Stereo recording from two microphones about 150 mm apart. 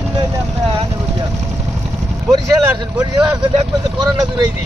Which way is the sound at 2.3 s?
25° right (ahead or behind).